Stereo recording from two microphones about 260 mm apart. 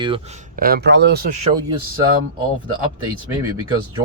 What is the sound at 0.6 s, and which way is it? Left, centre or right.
Speech, right.